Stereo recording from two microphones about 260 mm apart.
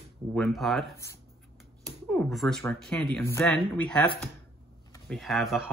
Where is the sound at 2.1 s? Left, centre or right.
Centre.